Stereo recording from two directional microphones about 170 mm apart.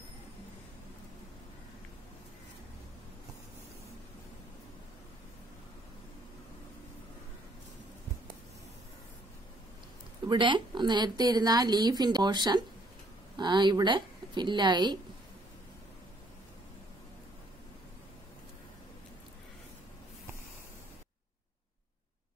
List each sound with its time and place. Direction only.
10.2 s a woman's voice: 25° right (ahead or behind)